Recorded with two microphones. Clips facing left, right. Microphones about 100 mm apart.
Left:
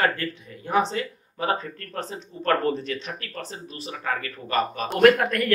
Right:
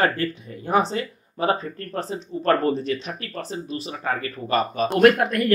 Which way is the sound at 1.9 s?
5° right (ahead or behind).